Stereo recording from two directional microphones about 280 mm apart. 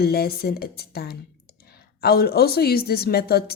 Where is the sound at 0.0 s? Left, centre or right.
Left.